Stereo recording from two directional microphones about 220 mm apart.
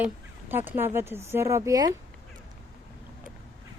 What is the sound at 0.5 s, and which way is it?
Speech, 10° right (ahead or behind).